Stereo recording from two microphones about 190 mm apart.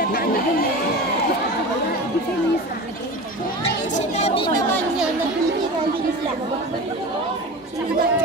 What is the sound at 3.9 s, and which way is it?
Chatter, 35° left (ahead or behind).